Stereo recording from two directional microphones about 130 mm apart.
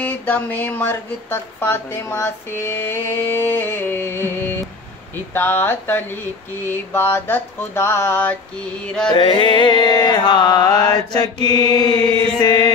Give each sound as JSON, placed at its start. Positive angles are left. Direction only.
{"t": 0.0, "sound": "speech", "side_deg": 10}
{"t": 8.8, "sound": "music", "side_deg": 5}
{"t": 9.1, "sound": "mantra", "side_deg": 40}